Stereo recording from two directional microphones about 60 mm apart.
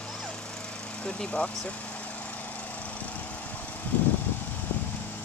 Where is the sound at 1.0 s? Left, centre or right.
Centre.